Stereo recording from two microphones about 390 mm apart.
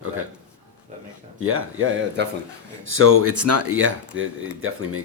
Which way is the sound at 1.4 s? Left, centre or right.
Right.